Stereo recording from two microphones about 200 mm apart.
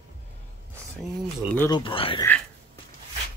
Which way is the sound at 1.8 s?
25° left (ahead or behind).